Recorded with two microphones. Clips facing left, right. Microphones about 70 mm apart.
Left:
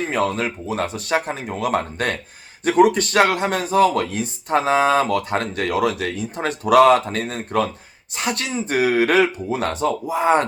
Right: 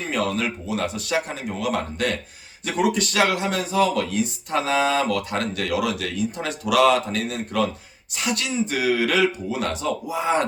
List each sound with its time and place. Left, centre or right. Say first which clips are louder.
0.1 s speech: right 2 dB; left